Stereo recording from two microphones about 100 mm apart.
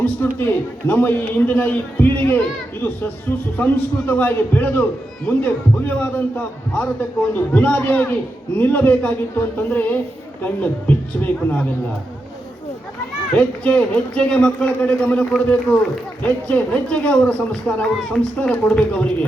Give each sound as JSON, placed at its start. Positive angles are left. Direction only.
{"t": 0.0, "sound": "a man's voice", "side_deg": 20}
{"t": 13.3, "sound": "speech", "side_deg": 15}